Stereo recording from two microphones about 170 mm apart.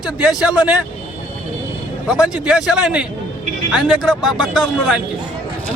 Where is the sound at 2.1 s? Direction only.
5° right (ahead or behind).